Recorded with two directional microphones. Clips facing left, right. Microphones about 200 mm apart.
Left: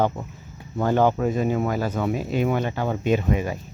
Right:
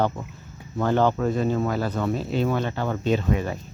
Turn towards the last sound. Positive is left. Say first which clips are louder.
# left 1 dB
turn(degrees=10)  # may be behind; listen again after turning